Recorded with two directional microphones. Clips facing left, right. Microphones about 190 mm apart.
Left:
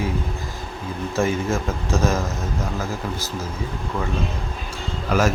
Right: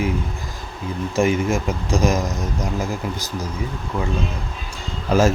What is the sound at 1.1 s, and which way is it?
A man's voice, 15° right (ahead or behind).